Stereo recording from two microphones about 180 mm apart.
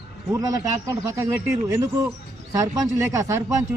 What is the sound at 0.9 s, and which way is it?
Speech, 15° right (ahead or behind).